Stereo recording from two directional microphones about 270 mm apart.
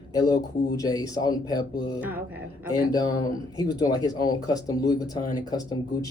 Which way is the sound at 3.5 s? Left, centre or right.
Centre.